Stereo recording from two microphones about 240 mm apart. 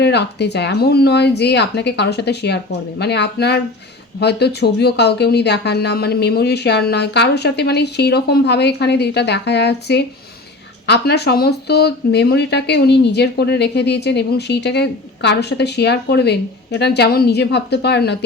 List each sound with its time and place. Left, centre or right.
0.0 s speech: left